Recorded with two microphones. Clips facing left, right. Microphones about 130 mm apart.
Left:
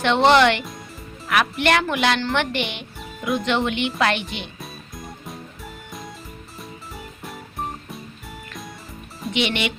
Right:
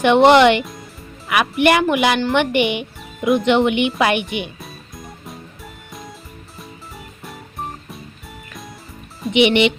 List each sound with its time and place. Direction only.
0.0 s a woman's voice: 15° right (ahead or behind)
4.6 s music: centre (ahead or behind)
6.6 s music: centre (ahead or behind)
9.3 s speech: 20° right (ahead or behind)